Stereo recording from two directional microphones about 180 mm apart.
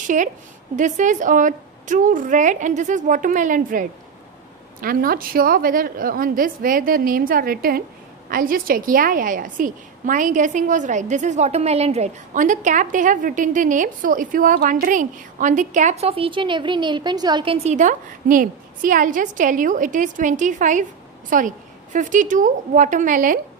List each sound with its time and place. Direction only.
0.0 s a woman's voice: 45° right (ahead or behind); by 17.7 s 30° right (ahead or behind)
17.7 s a woman's voice: 45° right (ahead or behind)